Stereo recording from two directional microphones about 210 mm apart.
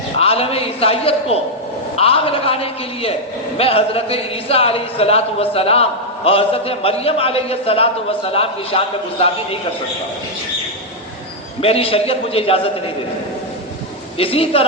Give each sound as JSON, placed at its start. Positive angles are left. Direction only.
{"t": 0.2, "sound": "a man's voice", "side_deg": 30}
{"t": 11.6, "sound": "a man's voice", "side_deg": 25}
{"t": 14.2, "sound": "a man's voice", "side_deg": 25}